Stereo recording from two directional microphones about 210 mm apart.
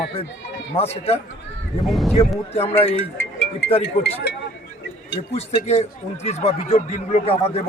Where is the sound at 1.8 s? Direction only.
Centre (ahead or behind).